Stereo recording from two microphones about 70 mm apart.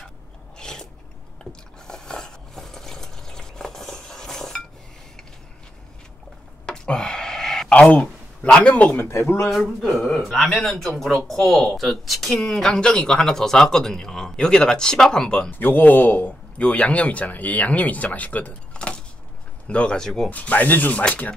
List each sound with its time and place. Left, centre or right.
0.6 s a sound: centre
6.6 s a sound: centre
7.7 s speech: centre
9.5 s speech: centre
15.5 s a man's voice: left; by 20.2 s centre
20.2 s a man's voice: left